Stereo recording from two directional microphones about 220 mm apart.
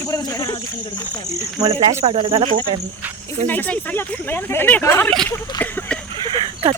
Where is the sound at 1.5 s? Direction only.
20° right (ahead or behind).